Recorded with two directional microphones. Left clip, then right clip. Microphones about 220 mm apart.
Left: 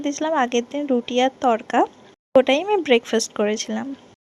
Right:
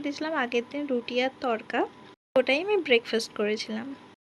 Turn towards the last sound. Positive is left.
turn(degrees=10)  # may be behind; listen again after turning